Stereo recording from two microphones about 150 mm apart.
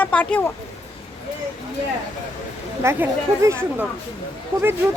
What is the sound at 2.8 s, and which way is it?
Speech, 15° right (ahead or behind).